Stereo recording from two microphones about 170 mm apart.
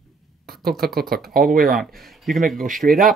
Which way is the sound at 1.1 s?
60° right (ahead or behind).